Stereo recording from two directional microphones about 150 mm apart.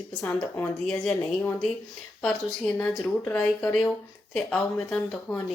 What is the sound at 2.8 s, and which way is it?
Speech, 10° left (ahead or behind).